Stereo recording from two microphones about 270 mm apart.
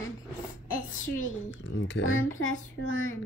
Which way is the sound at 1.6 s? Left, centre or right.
Left.